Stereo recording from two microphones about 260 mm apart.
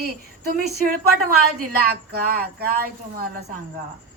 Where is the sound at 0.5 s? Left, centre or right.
Right.